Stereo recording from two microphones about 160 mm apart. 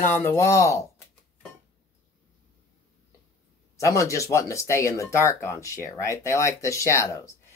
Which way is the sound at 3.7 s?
20° left (ahead or behind).